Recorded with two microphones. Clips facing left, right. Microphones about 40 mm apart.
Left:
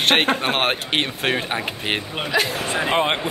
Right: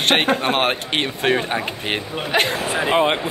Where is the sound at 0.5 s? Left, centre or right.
Centre.